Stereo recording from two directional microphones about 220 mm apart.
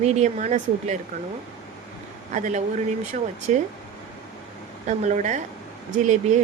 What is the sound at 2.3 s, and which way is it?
Speech, 35° right (ahead or behind).